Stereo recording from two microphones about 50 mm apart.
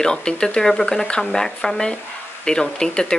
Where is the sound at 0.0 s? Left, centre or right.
Centre.